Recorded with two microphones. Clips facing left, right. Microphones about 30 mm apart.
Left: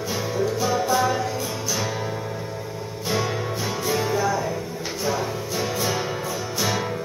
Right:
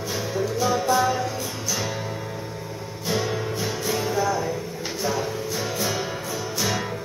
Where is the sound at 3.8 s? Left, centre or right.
Centre.